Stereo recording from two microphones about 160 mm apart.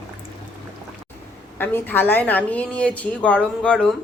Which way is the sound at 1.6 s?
10° left (ahead or behind).